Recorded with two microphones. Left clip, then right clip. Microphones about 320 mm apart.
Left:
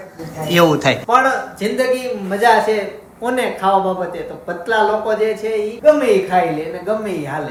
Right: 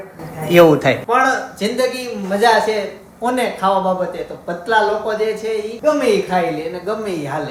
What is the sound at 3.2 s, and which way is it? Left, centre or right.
A man's voice, centre.